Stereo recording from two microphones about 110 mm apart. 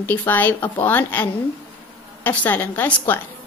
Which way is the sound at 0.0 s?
15° left (ahead or behind).